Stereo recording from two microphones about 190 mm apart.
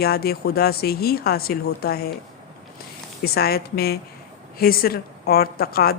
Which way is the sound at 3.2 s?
55° left (ahead or behind).